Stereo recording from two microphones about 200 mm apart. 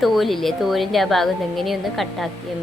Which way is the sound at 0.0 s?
Centre (ahead or behind).